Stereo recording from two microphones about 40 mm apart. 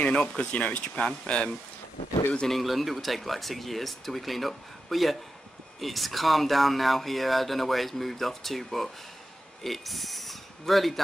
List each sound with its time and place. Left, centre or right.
0.0 s speech: left
2.4 s speech: centre
9.6 s a sound: centre